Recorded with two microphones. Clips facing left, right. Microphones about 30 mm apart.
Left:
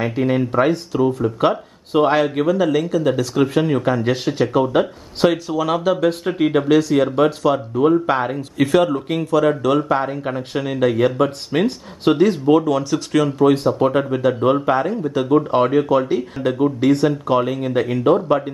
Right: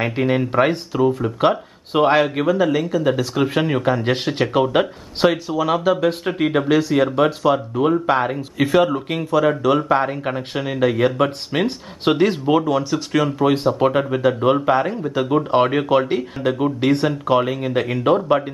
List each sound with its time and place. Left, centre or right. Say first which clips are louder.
0.0 s speech: even; right
0.9 s speech: even; centre
4.1 s speech: left 1 dB; right
5.2 s speech: even; centre; by 16.2 s right
16.2 s speech: even; centre
16.5 s speech: left 3 dB; right
17.1 s speech: even; centre